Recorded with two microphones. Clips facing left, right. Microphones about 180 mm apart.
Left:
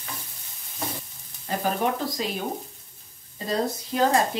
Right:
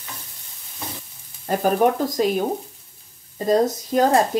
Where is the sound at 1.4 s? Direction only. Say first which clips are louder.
Right 7 dB; 45° right (ahead or behind).